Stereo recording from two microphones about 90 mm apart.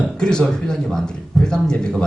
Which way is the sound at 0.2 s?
5° left (ahead or behind).